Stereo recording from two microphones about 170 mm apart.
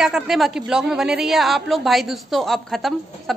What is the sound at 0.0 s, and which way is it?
A woman's voice, centre (ahead or behind).